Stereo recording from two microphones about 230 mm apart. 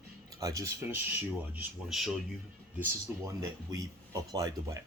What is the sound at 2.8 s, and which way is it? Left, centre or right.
Speech, centre.